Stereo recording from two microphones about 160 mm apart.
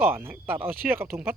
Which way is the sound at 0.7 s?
70° right (ahead or behind).